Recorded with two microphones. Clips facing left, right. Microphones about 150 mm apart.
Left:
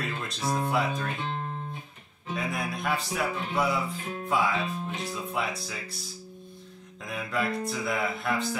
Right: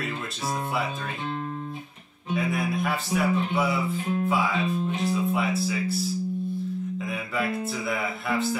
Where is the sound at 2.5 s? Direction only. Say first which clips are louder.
Right 3 dB; centre (ahead or behind).